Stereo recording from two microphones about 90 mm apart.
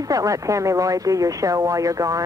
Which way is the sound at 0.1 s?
40° right (ahead or behind).